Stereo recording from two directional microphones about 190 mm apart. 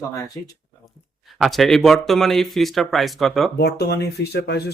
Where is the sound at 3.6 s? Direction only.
55° left (ahead or behind).